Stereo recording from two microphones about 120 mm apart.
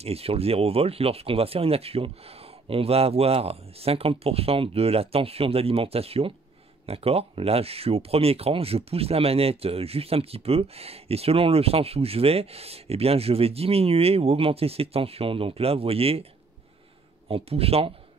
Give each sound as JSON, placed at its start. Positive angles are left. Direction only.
{"t": 0.0, "sound": "speech", "side_deg": -55}
{"t": 17.3, "sound": "speech", "side_deg": -55}